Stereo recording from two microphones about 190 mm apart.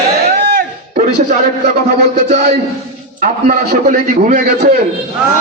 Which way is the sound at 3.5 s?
45° right (ahead or behind).